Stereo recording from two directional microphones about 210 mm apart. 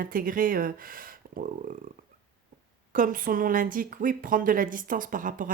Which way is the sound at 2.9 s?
40° right (ahead or behind).